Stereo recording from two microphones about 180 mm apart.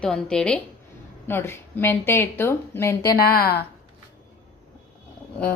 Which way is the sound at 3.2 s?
60° left (ahead or behind).